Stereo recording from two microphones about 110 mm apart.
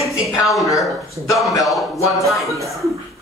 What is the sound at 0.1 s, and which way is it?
Speech, centre (ahead or behind).